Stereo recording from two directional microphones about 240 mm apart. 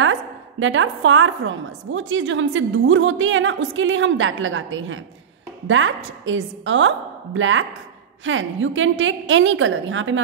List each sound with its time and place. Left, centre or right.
0.0 s a woman's voice: right